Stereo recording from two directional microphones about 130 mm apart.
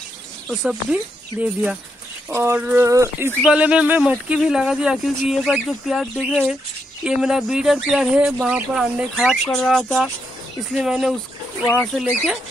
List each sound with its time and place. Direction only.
0.5 s speech: 5° right (ahead or behind)
3.4 s speech: 10° right (ahead or behind)